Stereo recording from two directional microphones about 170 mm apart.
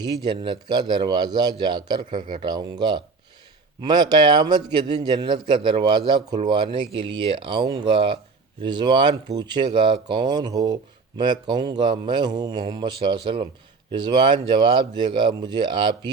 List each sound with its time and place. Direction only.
0.0 s speech: 25° right (ahead or behind)